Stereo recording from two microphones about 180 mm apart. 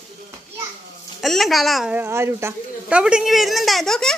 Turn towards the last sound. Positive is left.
turn(degrees=0)  # may be behind; listen again after turning